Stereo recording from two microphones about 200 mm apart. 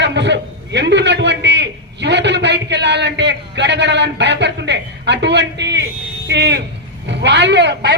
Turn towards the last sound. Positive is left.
turn(degrees=-60)  # may be behind; listen again after turning